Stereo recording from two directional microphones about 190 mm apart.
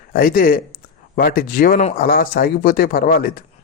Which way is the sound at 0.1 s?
50° left (ahead or behind).